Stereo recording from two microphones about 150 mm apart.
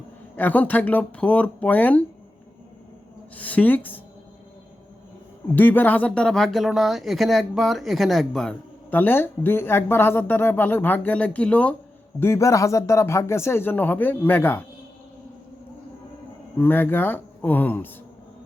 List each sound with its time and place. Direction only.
0.3 s speech: 10° left (ahead or behind)
3.3 s a woman's voice: 10° left (ahead or behind)
5.5 s speech: 10° left (ahead or behind)
16.6 s speech: 15° left (ahead or behind)